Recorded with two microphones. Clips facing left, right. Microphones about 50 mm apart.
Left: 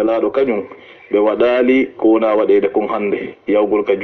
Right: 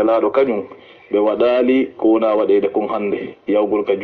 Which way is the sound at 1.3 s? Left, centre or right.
Left.